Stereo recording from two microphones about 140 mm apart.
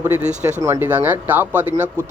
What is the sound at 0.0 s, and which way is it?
Speech, 15° right (ahead or behind).